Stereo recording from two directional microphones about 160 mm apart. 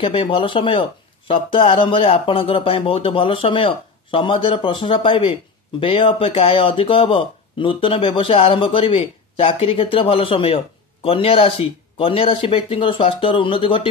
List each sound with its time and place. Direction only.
0.0 s speech: 35° left (ahead or behind)